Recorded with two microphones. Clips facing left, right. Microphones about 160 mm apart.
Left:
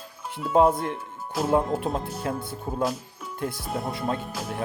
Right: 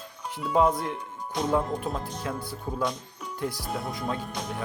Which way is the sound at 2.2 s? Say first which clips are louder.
Left 3 dB; 25° left (ahead or behind).